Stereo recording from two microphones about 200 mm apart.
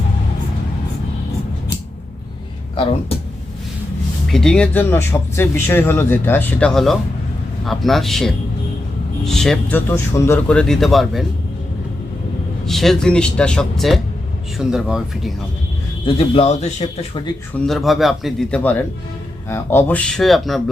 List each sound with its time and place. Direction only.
4.3 s speech: 5° left (ahead or behind)
12.6 s speech: centre (ahead or behind)
16.0 s speech: 30° left (ahead or behind)
17.7 s speech: centre (ahead or behind)